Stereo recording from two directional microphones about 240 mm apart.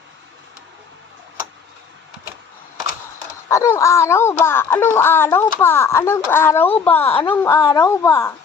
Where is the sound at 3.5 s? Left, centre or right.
Centre.